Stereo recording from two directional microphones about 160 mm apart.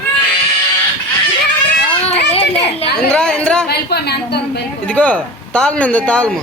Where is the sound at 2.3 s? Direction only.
40° left (ahead or behind).